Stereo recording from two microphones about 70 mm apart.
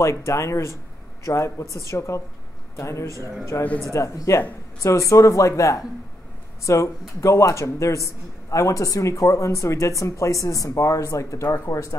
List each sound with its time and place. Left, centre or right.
0.0 s speech: left
3.1 s a man's voice: right
3.9 s speech: left